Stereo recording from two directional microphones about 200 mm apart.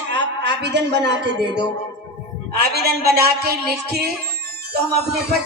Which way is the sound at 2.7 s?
50° right (ahead or behind).